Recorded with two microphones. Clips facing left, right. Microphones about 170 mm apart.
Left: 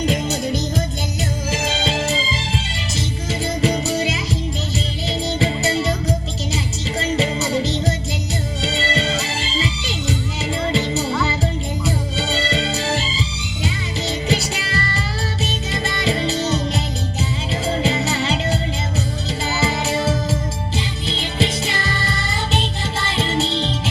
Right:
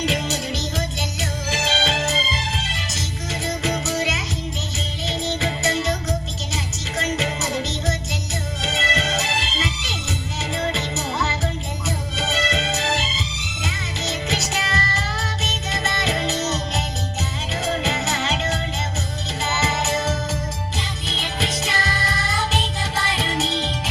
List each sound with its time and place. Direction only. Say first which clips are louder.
0.0 s music: left 3 dB; 50° left (ahead or behind)
1.8 s music: left 2 dB; 30° left (ahead or behind)
3.6 s music: left 5 dB; 30° left (ahead or behind)
14.3 s music: left 3 dB; 30° left (ahead or behind)